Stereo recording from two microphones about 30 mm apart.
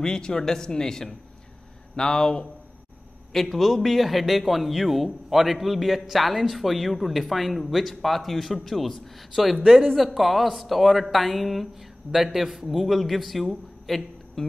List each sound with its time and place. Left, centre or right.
0.0 s speech: left
3.3 s a man's voice: centre
13.8 s a sound: centre